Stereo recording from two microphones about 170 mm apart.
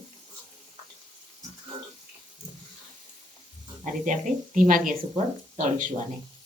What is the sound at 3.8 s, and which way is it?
Speech, 45° right (ahead or behind).